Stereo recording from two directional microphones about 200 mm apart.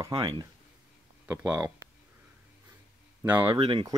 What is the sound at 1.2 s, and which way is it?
Speech, 10° right (ahead or behind).